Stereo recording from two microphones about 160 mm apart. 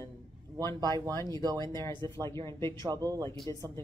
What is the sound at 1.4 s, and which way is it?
Speech, 25° right (ahead or behind).